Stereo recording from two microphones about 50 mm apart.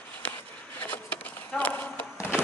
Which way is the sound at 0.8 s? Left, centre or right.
Left.